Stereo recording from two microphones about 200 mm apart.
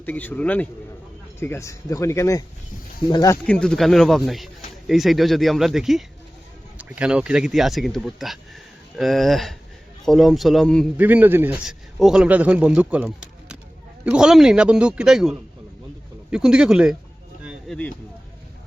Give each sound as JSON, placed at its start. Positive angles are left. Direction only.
{"t": 0.0, "sound": "speech", "side_deg": 10}
{"t": 3.4, "sound": "a man's voice", "side_deg": 5}
{"t": 10.9, "sound": "a man's voice", "side_deg": -10}
{"t": 17.4, "sound": "a sound", "side_deg": -5}